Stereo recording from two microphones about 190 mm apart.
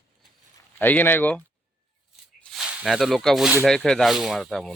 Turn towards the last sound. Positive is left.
turn(degrees=0)  # may be behind; listen again after turning